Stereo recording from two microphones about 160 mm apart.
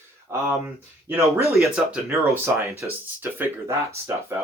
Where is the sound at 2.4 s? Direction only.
15° right (ahead or behind).